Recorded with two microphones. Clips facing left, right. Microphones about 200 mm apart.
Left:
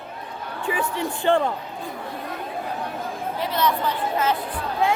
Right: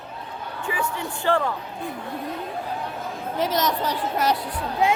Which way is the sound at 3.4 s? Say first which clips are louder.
Right 1 dB; 40° right (ahead or behind).